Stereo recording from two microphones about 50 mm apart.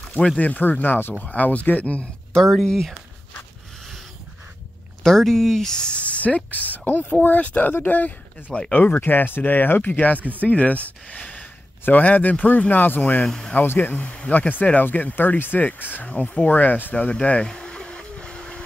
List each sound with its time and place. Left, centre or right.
0.4 s speech: left
1.2 s speech: left
2.3 s speech: centre
5.0 s speech: centre; by 10.1 s left
10.1 s speech: right
10.4 s speech: left
13.2 s speech: centre
13.6 s speech: left
16.9 s a sound: left